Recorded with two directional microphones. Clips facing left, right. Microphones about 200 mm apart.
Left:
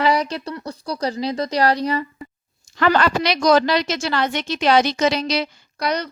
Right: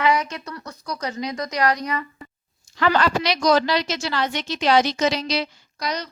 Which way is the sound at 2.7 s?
55° left (ahead or behind).